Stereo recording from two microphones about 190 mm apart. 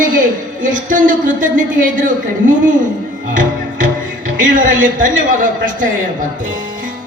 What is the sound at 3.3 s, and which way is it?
Speech, 45° right (ahead or behind).